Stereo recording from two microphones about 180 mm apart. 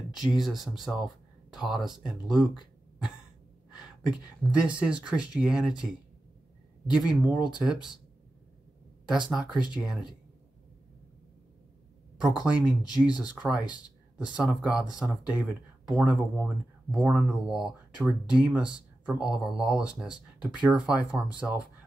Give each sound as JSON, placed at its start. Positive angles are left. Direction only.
{"t": 0.1, "sound": "speech", "side_deg": 0}
{"t": 4.0, "sound": "speech", "side_deg": -5}
{"t": 6.9, "sound": "speech", "side_deg": -5}
{"t": 9.0, "sound": "speech", "side_deg": -5}
{"t": 12.2, "sound": "speech", "side_deg": -5}